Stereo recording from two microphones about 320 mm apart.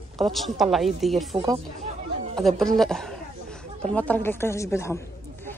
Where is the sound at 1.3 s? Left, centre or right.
Centre.